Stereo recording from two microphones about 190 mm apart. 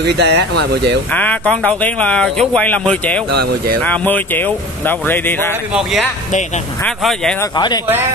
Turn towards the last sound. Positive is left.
turn(degrees=20)  # may be behind; listen again after turning